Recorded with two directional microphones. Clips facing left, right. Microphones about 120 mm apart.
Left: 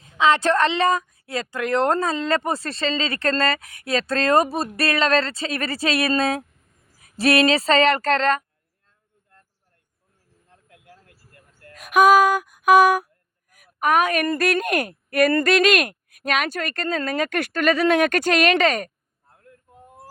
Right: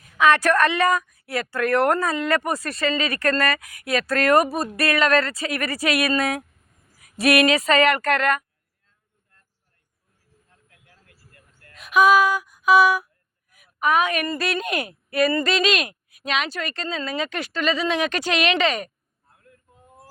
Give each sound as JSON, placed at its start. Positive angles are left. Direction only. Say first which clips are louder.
{"t": 0.0, "sound": "a woman's voice", "louder": "even", "side_deg": 25}
{"t": 11.7, "sound": "a woman's voice", "louder": "left 2 dB", "side_deg": 45}